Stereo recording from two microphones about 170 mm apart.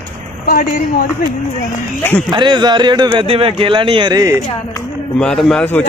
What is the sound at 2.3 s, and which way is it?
Speech, 25° right (ahead or behind).